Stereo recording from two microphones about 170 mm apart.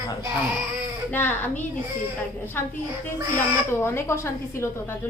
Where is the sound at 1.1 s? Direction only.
10° left (ahead or behind).